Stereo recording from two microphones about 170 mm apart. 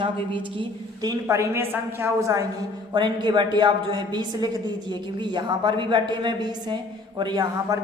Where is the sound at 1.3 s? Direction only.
15° right (ahead or behind).